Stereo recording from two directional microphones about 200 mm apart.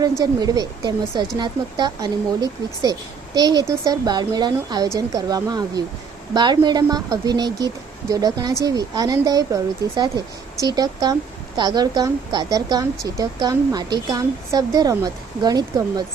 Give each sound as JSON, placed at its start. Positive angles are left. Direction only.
{"t": 0.2, "sound": "speech", "side_deg": -20}